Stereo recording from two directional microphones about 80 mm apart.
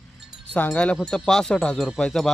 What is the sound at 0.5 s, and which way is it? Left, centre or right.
Speech, centre.